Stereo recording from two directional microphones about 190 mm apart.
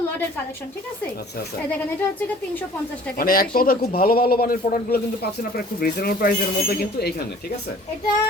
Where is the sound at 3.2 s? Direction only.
50° left (ahead or behind).